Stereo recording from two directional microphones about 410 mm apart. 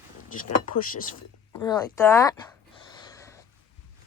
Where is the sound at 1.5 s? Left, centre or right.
Centre.